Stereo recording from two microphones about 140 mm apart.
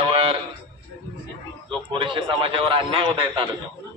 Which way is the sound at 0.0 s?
40° right (ahead or behind).